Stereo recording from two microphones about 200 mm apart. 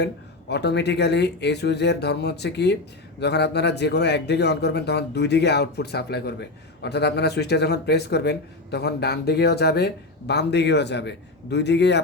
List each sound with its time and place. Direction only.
0.0 s a man's voice: 55° left (ahead or behind)